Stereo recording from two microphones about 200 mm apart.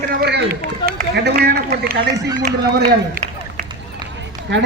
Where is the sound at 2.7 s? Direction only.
45° right (ahead or behind).